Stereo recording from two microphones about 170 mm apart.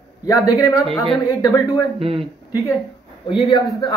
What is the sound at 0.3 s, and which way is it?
Speech, 20° left (ahead or behind).